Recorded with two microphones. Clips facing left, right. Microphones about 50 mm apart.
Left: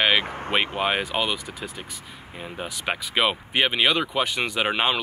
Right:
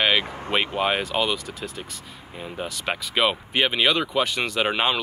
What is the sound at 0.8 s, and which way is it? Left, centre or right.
Speech, centre.